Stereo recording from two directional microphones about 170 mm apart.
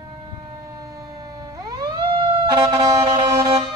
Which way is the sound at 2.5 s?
25° right (ahead or behind).